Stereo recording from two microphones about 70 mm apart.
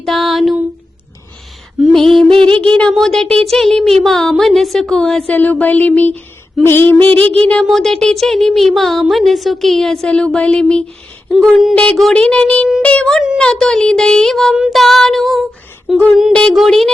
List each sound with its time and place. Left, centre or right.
0.0 s speech: centre
1.9 s a sound: centre
2.9 s speech: centre
5.3 s music: left
7.6 s speech: centre
11.7 s music: centre
12.1 s a sound: centre
12.8 s music: centre
13.4 s a sound: centre
14.7 s speech: centre
16.3 s a sound: centre
16.6 s speech: centre